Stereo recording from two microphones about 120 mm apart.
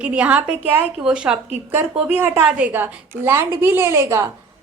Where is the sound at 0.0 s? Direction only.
10° right (ahead or behind).